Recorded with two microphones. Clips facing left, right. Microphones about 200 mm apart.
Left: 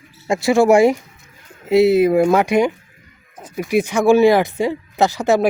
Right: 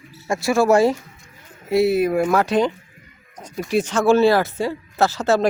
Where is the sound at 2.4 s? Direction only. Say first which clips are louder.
Left 3 dB; 10° left (ahead or behind).